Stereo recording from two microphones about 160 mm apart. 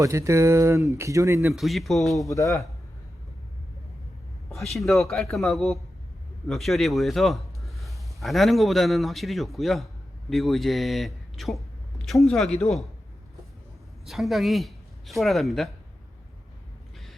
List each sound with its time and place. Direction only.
0.0 s speech: 20° right (ahead or behind)
1.5 s speech: centre (ahead or behind)
2.3 s speech: 20° left (ahead or behind)
4.5 s a man's voice: centre (ahead or behind)
14.0 s speech: centre (ahead or behind)